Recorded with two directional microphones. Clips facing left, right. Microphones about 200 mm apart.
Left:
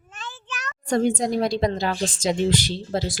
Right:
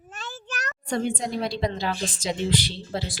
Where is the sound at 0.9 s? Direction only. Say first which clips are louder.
Left 6 dB; 45° left (ahead or behind).